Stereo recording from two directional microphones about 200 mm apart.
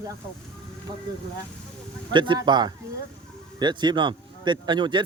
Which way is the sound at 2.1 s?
25° right (ahead or behind).